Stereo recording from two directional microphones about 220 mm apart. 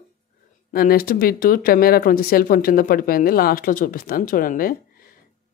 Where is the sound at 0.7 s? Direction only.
45° left (ahead or behind).